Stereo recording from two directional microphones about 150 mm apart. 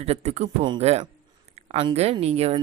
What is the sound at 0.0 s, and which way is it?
Speech, 45° right (ahead or behind).